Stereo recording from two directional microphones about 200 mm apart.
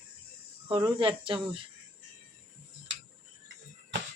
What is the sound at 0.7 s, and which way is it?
Speech, 25° right (ahead or behind).